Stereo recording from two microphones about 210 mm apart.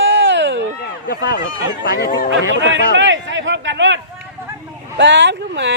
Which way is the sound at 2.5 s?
60° right (ahead or behind).